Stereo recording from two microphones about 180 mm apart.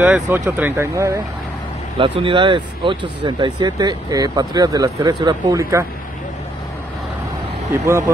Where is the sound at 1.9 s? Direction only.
30° right (ahead or behind).